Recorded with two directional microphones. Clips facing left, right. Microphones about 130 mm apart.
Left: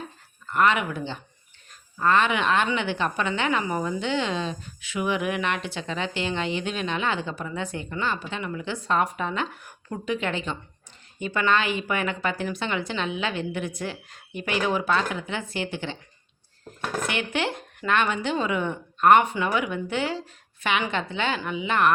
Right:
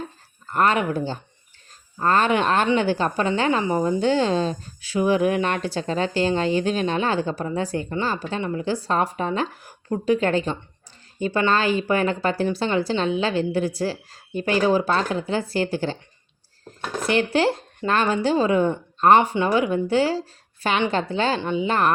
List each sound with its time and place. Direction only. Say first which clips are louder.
0.4 s a woman's voice: right 2 dB; 40° right (ahead or behind)
17.0 s a woman's voice: right 8 dB; 35° right (ahead or behind)